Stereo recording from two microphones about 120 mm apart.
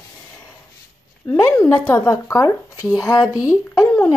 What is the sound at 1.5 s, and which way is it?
A woman's voice, 20° left (ahead or behind).